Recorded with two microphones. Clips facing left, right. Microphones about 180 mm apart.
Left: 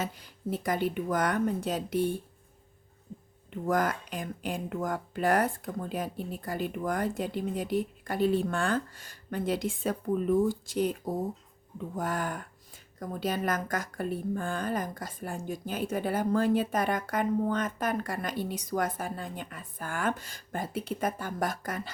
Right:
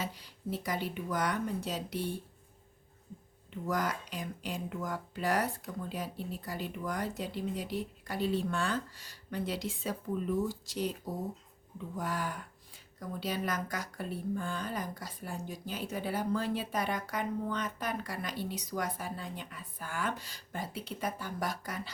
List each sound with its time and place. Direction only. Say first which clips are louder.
0.0 s speech: left 4 dB; 50° left (ahead or behind)
3.5 s speech: left 5 dB; 50° left (ahead or behind)